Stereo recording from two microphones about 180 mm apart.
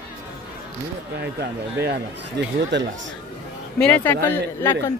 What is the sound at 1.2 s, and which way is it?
Speech, 65° right (ahead or behind).